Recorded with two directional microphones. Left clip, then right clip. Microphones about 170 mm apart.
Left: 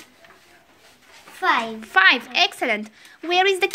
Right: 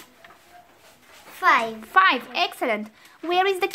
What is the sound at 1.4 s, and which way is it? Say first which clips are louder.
Speech: right 2 dB; 15° right (ahead or behind).